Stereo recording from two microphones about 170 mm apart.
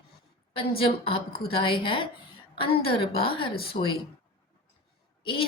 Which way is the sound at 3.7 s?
45° left (ahead or behind).